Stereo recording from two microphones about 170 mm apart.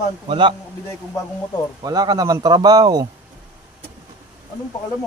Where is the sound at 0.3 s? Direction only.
30° right (ahead or behind).